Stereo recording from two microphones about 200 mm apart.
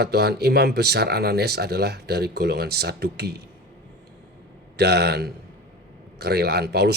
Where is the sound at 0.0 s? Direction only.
55° right (ahead or behind).